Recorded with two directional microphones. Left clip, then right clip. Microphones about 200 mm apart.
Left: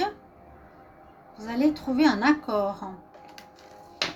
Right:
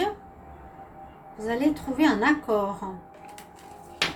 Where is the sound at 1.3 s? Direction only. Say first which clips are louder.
Even; 45° left (ahead or behind).